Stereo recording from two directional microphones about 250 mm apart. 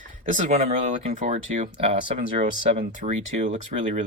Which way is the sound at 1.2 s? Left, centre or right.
Right.